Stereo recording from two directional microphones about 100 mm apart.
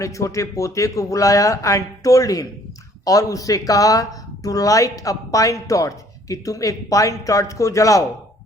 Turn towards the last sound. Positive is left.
turn(degrees=35)  # may be behind; listen again after turning